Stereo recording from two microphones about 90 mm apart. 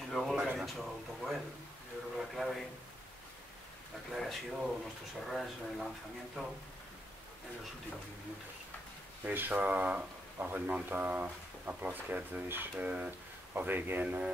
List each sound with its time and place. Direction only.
0.1 s a sound: centre (ahead or behind)
2.3 s speech: centre (ahead or behind)
4.1 s speech: centre (ahead or behind)
9.2 s speech: 20° right (ahead or behind)